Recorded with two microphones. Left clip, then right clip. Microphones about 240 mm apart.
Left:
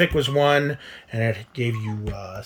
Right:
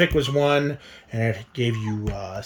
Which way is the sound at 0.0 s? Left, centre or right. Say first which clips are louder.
Left 1 dB; centre.